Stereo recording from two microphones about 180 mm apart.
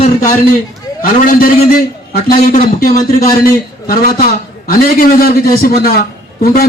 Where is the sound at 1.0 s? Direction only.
50° left (ahead or behind).